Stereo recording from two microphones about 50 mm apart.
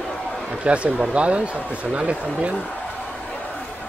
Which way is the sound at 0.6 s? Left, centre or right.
Right.